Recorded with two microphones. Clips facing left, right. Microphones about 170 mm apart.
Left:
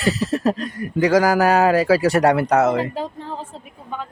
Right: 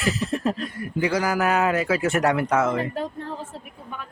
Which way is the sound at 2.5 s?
75° left (ahead or behind).